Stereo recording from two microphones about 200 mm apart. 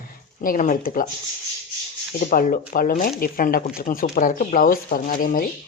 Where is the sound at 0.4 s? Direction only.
40° left (ahead or behind).